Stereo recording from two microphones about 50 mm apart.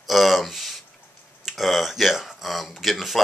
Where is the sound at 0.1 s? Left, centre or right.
Centre.